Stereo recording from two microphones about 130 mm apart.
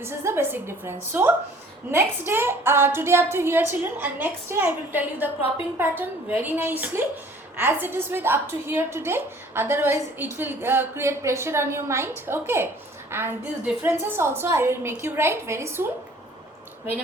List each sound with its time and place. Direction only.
0.0 s a woman's voice: 20° right (ahead or behind)